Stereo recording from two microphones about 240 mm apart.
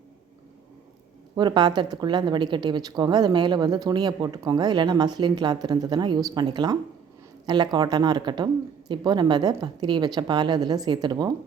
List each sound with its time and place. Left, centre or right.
1.4 s a woman's voice: centre